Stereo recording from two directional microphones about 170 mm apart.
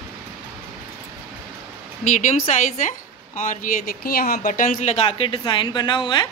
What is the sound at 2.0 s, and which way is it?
A woman's voice, 45° left (ahead or behind).